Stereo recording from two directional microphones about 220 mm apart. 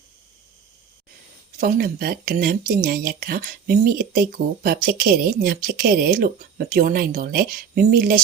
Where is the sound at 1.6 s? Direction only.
40° right (ahead or behind).